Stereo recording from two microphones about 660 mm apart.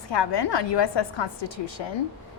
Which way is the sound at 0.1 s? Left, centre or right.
Left.